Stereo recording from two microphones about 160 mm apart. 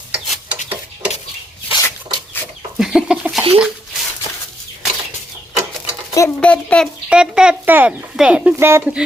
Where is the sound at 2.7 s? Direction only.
5° right (ahead or behind).